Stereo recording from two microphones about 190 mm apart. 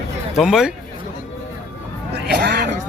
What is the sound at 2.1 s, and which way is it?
Speech, 60° right (ahead or behind).